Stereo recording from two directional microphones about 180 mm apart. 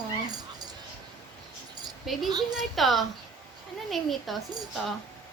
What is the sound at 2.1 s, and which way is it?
A woman's voice, centre (ahead or behind).